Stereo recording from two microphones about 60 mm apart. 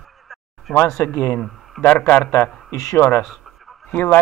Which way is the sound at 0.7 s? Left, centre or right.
Left.